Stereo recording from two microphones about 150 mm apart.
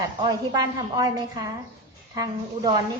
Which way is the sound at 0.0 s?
25° right (ahead or behind).